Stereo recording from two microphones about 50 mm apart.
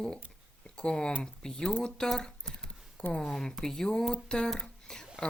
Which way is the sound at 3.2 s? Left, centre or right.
Centre.